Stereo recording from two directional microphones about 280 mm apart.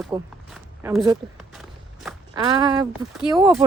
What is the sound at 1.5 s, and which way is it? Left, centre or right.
Walk, centre.